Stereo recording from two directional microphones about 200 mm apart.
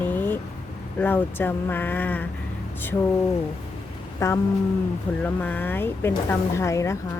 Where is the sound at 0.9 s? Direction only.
10° left (ahead or behind).